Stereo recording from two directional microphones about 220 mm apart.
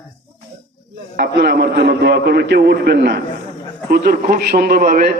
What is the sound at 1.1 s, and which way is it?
A man's voice, 50° right (ahead or behind).